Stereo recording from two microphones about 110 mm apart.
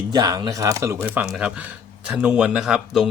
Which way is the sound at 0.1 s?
35° right (ahead or behind).